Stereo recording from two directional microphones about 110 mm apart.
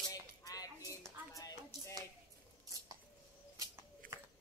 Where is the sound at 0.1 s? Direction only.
35° left (ahead or behind).